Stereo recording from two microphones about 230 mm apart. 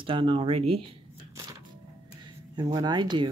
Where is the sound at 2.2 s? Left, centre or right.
Centre.